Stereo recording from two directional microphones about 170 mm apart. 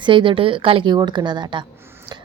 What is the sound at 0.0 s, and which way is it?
A woman's voice, 30° right (ahead or behind).